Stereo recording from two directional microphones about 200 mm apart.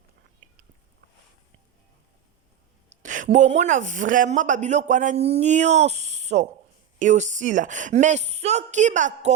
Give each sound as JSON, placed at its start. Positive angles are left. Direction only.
{"t": 0.4, "sound": "biting", "side_deg": -40}
{"t": 2.9, "sound": "a sound", "side_deg": -40}
{"t": 3.3, "sound": "speech", "side_deg": -35}